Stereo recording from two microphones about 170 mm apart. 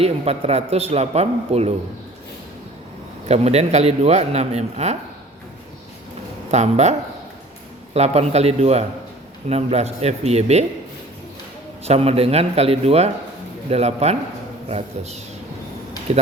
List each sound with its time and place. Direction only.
0.0 s a man's voice: 35° right (ahead or behind)
3.2 s a man's voice: 40° right (ahead or behind)
6.5 s a man's voice: 40° right (ahead or behind)
7.9 s a man's voice: 40° right (ahead or behind)
11.9 s a man's voice: 35° right (ahead or behind)